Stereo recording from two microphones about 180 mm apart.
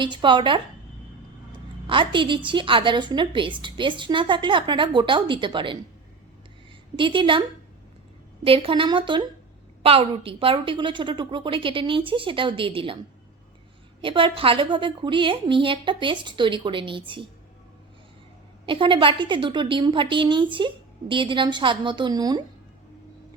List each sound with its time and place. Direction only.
0.0 s a woman's voice: 25° right (ahead or behind)
6.9 s a woman's voice: 25° right (ahead or behind)
8.4 s a woman's voice: 30° right (ahead or behind)
14.0 s a woman's voice: 30° right (ahead or behind)
18.6 s a woman's voice: 30° right (ahead or behind)